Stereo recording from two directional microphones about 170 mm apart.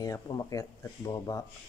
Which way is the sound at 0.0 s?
20° left (ahead or behind).